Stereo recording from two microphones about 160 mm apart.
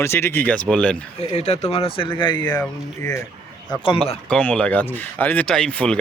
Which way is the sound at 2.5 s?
10° left (ahead or behind).